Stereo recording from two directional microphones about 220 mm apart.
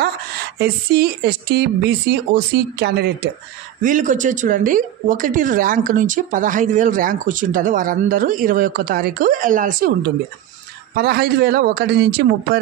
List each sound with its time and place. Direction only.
0.6 s a woman's voice: 45° right (ahead or behind)
3.8 s a woman's voice: 35° right (ahead or behind)